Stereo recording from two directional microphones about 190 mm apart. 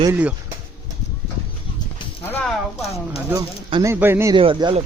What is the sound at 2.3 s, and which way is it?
Speech, 5° left (ahead or behind).